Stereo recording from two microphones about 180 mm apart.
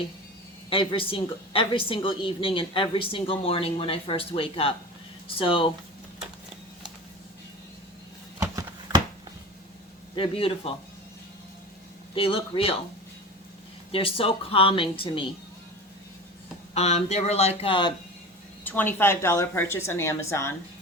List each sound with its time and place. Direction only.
0.7 s a woman's voice: 30° left (ahead or behind)
8.4 s a sound: 20° right (ahead or behind)
10.2 s a woman's voice: 30° left (ahead or behind)
12.1 s a woman's voice: 30° left (ahead or behind)
13.9 s a woman's voice: 30° left (ahead or behind)
16.7 s a woman's voice: 35° left (ahead or behind)
18.6 s a woman's voice: 10° left (ahead or behind)